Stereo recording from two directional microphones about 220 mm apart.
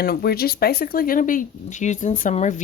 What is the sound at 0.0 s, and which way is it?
Speech, 45° left (ahead or behind).